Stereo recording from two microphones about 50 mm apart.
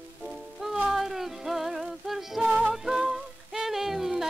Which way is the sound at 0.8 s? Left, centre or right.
Centre.